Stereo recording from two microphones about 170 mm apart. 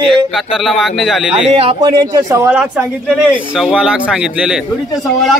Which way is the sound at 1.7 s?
25° right (ahead or behind).